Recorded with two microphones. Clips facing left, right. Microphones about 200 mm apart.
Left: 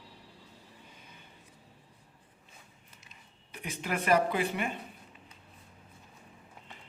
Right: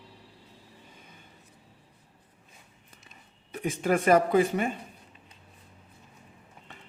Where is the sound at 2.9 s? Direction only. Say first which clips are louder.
Right 3 dB; 50° right (ahead or behind).